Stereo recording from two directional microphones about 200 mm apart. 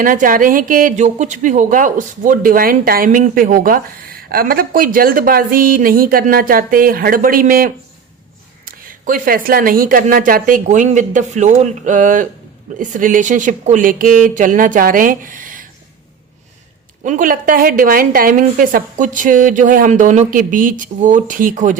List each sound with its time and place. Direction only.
0.0 s a woman's voice: 45° right (ahead or behind)
17.0 s a woman's voice: 40° right (ahead or behind)